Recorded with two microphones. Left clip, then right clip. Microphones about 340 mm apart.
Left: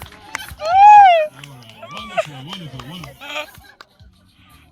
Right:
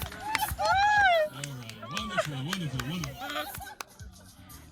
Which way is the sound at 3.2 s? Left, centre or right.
Centre.